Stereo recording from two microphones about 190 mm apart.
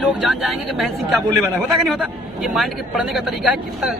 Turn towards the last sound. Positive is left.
turn(degrees=-5)  # may be behind; listen again after turning